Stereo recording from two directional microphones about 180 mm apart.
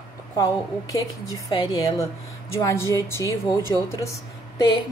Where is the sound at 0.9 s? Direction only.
20° left (ahead or behind).